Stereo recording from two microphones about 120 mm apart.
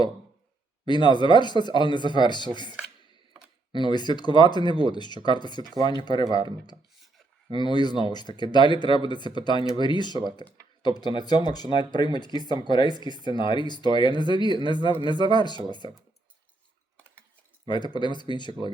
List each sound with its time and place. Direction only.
0.9 s speech: 40° left (ahead or behind)
3.7 s speech: 40° left (ahead or behind)
7.5 s speech: 40° left (ahead or behind)
17.7 s speech: 40° left (ahead or behind)